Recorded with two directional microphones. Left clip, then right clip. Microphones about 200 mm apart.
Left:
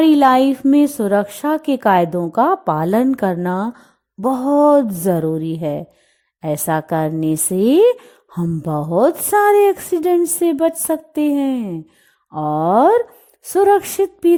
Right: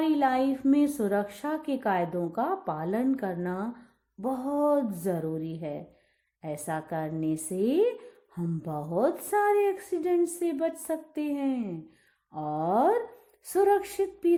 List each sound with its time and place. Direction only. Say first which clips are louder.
0.0 s speech: left 14 dB; 45° left (ahead or behind)